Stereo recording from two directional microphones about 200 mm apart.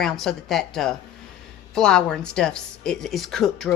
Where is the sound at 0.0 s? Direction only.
Centre (ahead or behind).